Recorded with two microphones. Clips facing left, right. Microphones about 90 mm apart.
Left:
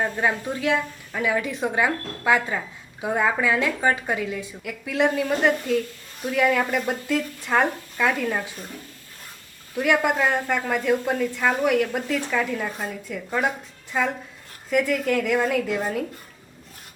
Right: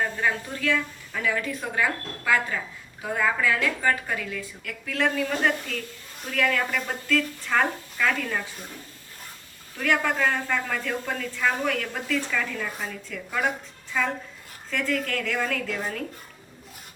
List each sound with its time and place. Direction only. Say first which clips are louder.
0.0 s a woman's voice: left 3 dB; 20° left (ahead or behind)
9.7 s a woman's voice: left 4 dB; 15° left (ahead or behind)
14.7 s a woman's voice: left 6 dB; 15° left (ahead or behind)